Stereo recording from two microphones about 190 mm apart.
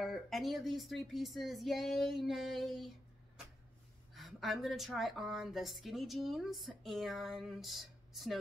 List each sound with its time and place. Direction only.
0.0 s a woman's voice: centre (ahead or behind)
4.1 s a woman's voice: centre (ahead or behind)